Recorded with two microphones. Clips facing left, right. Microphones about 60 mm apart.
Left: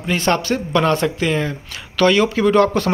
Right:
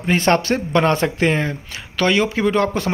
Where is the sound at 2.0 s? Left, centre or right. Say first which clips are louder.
Left 3 dB; right.